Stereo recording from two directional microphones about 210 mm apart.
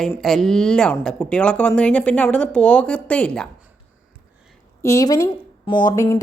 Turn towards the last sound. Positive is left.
turn(degrees=15)  # may be behind; listen again after turning